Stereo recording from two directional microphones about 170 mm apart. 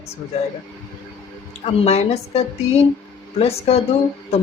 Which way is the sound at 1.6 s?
35° left (ahead or behind).